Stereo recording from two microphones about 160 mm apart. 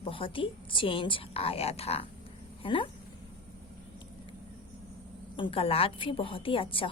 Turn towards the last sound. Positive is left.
turn(degrees=35)  # may be behind; listen again after turning